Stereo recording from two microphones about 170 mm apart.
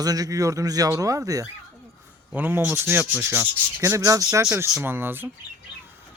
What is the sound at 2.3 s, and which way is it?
Rub, 10° right (ahead or behind).